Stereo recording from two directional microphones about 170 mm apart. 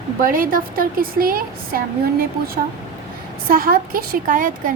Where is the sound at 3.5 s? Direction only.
55° right (ahead or behind).